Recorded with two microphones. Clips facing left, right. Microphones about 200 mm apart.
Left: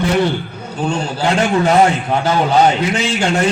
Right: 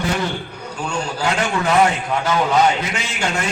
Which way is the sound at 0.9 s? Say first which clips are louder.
Left 4 dB; 35° left (ahead or behind).